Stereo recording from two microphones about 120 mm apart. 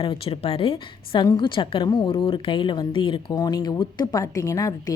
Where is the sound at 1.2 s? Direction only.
40° left (ahead or behind).